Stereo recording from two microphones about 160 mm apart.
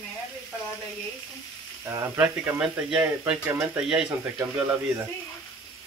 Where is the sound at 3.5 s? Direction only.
15° right (ahead or behind).